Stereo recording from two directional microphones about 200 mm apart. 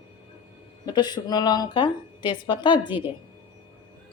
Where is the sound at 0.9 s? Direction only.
20° left (ahead or behind).